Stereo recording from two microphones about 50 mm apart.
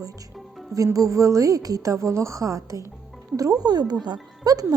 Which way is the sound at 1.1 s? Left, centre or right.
Right.